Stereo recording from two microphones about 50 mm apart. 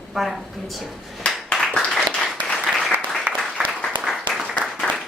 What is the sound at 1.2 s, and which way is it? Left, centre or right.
Clapping, left.